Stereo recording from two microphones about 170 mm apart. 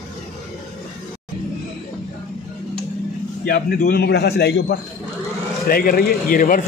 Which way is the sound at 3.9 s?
70° left (ahead or behind).